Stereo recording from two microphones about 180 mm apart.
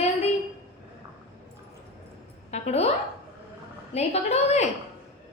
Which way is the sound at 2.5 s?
35° left (ahead or behind).